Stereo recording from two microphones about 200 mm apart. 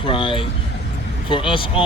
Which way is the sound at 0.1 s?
25° left (ahead or behind).